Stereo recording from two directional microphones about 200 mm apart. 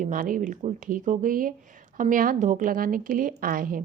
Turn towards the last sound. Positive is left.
turn(degrees=-45)  # may be behind; listen again after turning